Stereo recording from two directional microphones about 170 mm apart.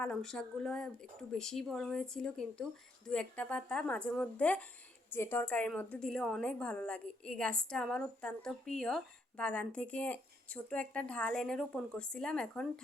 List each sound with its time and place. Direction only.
0.0 s a woman's voice: 5° left (ahead or behind)